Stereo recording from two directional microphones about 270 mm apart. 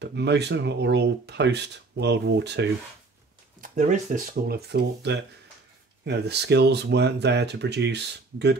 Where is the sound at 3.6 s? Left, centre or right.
Right.